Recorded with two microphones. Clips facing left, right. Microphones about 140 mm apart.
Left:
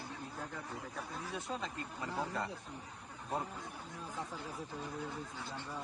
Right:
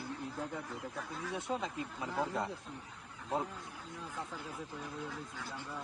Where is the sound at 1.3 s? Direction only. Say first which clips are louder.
Right 5 dB; 20° right (ahead or behind).